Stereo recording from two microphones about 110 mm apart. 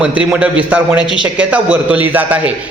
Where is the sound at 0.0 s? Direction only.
10° right (ahead or behind).